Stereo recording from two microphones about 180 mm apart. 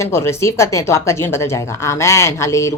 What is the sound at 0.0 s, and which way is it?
Speech, 15° left (ahead or behind).